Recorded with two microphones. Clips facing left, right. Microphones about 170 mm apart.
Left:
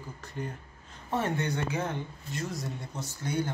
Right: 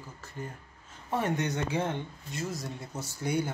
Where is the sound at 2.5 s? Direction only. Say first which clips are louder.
Even; centre (ahead or behind).